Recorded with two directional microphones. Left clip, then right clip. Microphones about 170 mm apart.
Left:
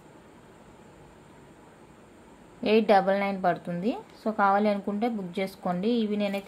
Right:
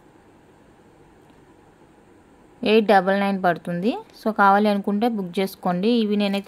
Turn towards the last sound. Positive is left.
turn(degrees=-55)  # may be behind; listen again after turning